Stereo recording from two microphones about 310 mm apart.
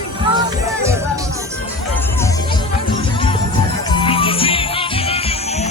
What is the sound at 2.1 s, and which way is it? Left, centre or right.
Music, centre.